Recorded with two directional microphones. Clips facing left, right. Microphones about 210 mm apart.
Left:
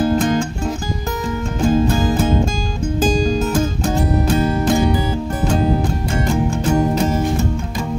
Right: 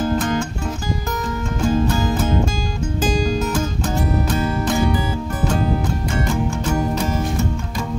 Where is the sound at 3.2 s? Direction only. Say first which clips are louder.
Left 3 dB; 35° left (ahead or behind).